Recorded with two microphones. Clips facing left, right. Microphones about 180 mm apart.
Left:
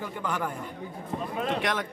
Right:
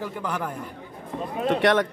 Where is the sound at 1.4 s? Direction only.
65° right (ahead or behind).